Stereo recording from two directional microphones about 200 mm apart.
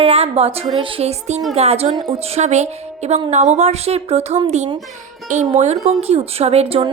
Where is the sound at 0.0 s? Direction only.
30° right (ahead or behind).